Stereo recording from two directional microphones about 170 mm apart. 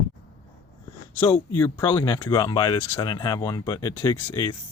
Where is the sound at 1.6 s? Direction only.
20° left (ahead or behind).